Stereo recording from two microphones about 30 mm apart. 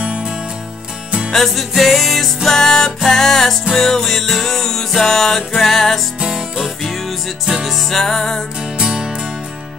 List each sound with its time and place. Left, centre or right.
1.3 s music: centre
6.1 s music: right
7.6 s music: centre
8.0 s music: centre
8.8 s music: right